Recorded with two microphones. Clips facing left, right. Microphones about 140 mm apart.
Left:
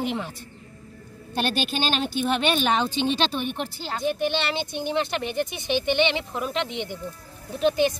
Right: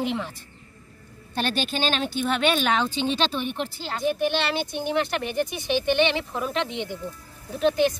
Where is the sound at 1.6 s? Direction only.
5° left (ahead or behind).